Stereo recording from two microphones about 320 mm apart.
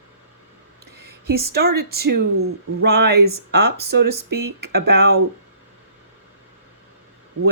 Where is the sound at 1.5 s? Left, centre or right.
Right.